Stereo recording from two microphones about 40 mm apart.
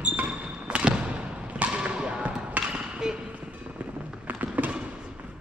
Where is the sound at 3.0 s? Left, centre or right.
Centre.